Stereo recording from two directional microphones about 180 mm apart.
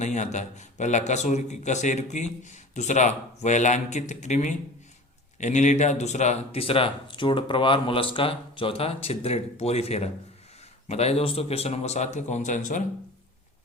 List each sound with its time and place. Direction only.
0.0 s speech: 40° left (ahead or behind)